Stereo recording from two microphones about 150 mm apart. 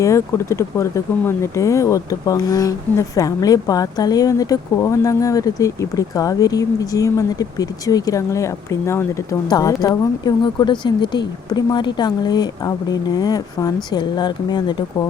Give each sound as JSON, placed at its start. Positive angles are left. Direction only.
{"t": 0.0, "sound": "speech", "side_deg": 20}